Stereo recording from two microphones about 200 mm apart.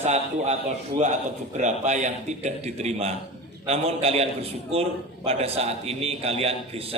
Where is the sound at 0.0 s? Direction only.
35° right (ahead or behind).